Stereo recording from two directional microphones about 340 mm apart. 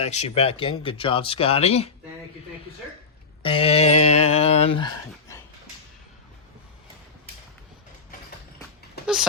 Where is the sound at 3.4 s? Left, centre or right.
Centre.